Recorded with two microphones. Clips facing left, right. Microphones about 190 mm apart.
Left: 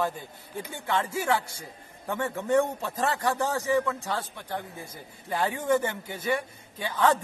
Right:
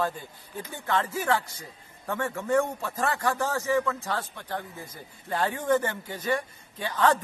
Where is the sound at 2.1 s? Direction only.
15° left (ahead or behind).